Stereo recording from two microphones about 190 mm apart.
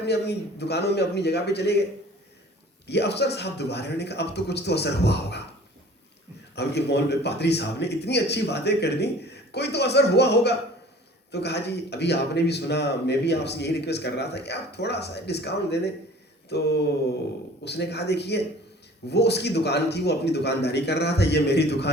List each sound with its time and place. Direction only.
0.0 s speech: 60° left (ahead or behind)
2.8 s speech: 60° left (ahead or behind)
6.6 s speech: 60° left (ahead or behind)